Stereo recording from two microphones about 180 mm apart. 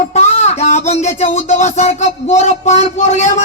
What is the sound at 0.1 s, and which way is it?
Speech, 40° left (ahead or behind).